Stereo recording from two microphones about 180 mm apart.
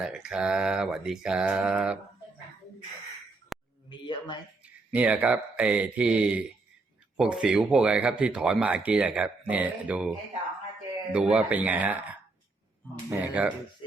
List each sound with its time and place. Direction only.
0.0 s speech: 5° right (ahead or behind)
3.5 s a sound: centre (ahead or behind)
3.8 s speech: 25° left (ahead or behind)
4.9 s speech: 5° right (ahead or behind)
11.1 s speech: 5° right (ahead or behind)
13.1 s speech: 10° right (ahead or behind)